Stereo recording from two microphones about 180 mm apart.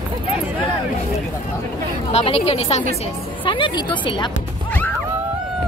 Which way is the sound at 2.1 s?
35° left (ahead or behind).